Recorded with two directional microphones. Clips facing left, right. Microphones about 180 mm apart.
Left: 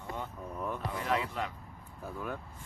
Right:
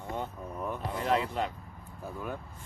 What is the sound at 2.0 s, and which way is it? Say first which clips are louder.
Speech: right 1 dB; 5° right (ahead or behind).